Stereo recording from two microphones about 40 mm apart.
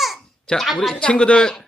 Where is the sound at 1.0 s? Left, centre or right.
Left.